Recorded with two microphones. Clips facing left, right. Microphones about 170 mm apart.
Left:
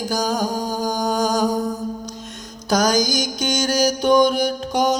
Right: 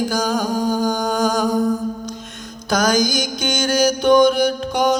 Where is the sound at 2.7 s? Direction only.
40° left (ahead or behind).